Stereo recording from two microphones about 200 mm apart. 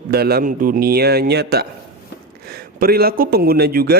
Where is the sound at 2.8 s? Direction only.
50° right (ahead or behind).